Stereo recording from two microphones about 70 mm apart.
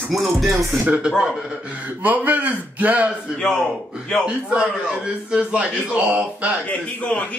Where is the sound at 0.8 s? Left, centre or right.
Centre.